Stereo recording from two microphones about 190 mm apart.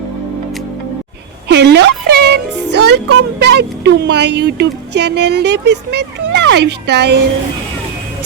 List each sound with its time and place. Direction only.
1.5 s music: 65° right (ahead or behind)
3.4 s speech: 65° right (ahead or behind)